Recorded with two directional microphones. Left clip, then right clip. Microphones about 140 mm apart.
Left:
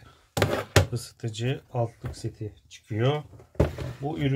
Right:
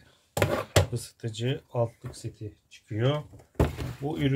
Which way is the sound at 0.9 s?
15° left (ahead or behind).